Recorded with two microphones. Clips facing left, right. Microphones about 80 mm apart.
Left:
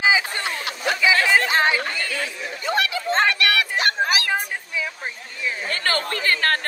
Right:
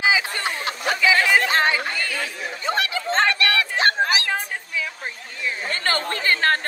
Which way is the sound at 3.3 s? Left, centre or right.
Right.